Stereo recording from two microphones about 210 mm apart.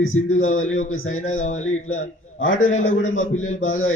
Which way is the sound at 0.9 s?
70° left (ahead or behind).